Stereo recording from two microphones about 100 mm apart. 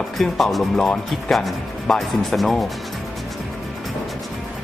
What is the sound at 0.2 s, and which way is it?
Speech, centre (ahead or behind).